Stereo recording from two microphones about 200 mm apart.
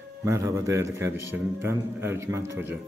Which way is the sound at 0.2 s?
15° right (ahead or behind).